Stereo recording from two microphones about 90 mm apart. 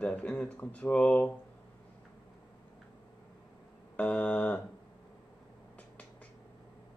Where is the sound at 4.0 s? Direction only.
15° left (ahead or behind).